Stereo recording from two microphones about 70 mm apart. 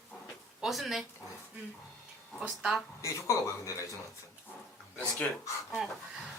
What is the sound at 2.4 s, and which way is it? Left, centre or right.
Speech, centre.